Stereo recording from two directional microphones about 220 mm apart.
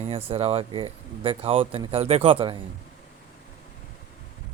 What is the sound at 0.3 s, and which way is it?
Speech, 25° right (ahead or behind).